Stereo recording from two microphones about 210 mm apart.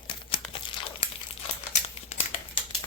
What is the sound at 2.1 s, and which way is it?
Crumpling, 30° left (ahead or behind).